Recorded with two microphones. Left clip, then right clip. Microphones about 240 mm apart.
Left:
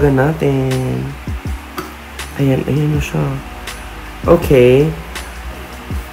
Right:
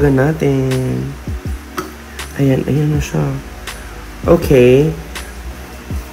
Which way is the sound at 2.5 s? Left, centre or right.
Right.